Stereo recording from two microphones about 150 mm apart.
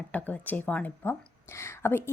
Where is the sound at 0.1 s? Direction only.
10° left (ahead or behind).